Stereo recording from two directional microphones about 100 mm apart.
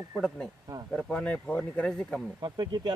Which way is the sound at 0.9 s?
10° left (ahead or behind).